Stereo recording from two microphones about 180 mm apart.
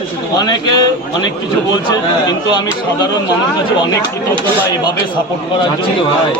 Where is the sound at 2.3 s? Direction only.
25° left (ahead or behind).